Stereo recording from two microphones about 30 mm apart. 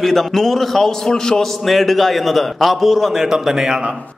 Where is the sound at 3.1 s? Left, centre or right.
Centre.